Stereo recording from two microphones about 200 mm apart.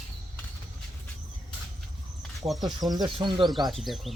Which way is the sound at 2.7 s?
20° right (ahead or behind).